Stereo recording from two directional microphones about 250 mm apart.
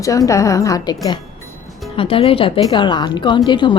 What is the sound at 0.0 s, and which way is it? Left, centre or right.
Speech, centre.